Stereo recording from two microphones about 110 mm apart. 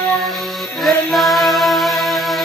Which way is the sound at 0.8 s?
Centre (ahead or behind).